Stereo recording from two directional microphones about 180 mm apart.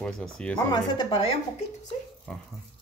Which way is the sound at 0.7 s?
25° left (ahead or behind).